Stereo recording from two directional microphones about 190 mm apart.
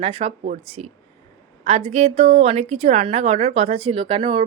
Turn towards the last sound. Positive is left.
turn(degrees=-25)  # may be behind; listen again after turning